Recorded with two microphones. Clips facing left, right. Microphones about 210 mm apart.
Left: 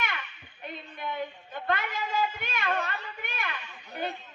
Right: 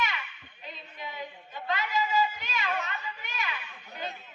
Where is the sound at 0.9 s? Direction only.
55° left (ahead or behind).